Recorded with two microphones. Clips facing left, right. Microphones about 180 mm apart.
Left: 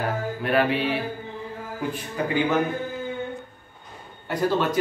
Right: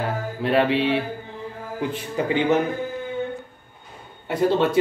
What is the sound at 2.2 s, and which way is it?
Speech, 20° right (ahead or behind).